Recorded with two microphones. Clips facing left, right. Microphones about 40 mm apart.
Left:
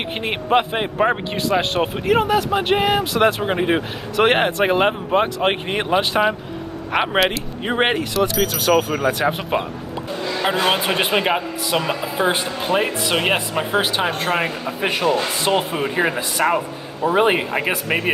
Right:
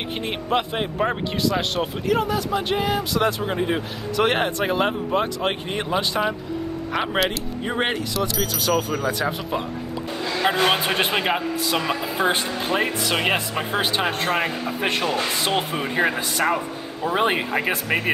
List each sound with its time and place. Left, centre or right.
0.2 s speech: left
1.8 s speech: left
9.5 s speech: left
10.6 s speech: centre
15.5 s speech: centre
16.0 s speech: centre